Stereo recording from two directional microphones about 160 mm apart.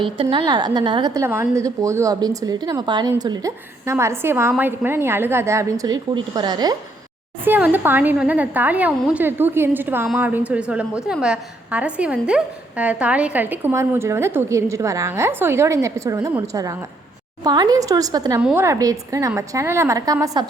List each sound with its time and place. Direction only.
0.0 s a woman's voice: 30° right (ahead or behind)
7.4 s a woman's voice: 10° right (ahead or behind)